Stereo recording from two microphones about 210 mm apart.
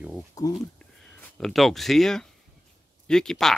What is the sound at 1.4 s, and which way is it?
Speech, centre (ahead or behind).